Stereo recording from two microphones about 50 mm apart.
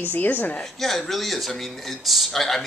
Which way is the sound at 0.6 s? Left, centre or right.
Centre.